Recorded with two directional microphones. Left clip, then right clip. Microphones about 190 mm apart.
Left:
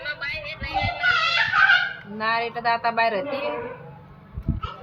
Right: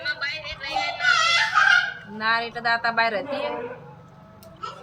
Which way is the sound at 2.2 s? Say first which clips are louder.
Even; 55° left (ahead or behind).